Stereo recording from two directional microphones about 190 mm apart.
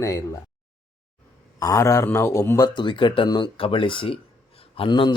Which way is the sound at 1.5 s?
20° left (ahead or behind).